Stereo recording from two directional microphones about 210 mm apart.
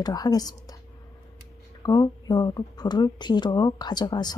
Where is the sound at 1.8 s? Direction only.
20° left (ahead or behind).